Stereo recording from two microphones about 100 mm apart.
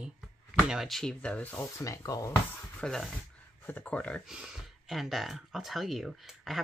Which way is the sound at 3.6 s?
15° left (ahead or behind).